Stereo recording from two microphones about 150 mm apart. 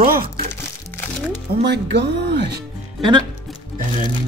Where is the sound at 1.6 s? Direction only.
90° right.